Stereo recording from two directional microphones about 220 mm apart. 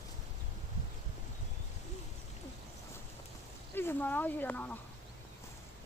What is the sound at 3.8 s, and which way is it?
Speech, 10° left (ahead or behind).